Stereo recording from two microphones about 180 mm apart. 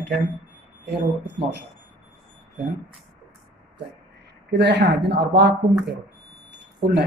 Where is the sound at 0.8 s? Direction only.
75° right (ahead or behind).